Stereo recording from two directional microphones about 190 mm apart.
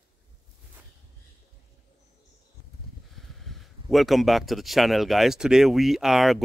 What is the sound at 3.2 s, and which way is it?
Speech, centre (ahead or behind).